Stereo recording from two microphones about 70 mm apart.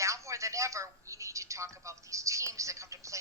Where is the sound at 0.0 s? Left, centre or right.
Right.